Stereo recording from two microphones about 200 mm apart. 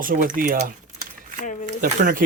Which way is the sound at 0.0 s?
45° right (ahead or behind).